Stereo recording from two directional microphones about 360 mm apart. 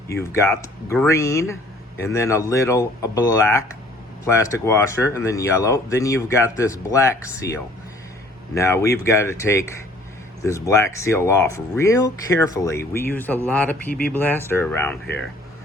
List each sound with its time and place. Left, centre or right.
0.3 s speech: centre